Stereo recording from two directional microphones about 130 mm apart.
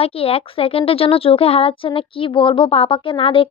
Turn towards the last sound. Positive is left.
turn(degrees=45)  # may be behind; listen again after turning